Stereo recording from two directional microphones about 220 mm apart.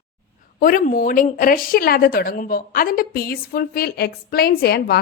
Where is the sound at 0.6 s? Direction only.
40° left (ahead or behind).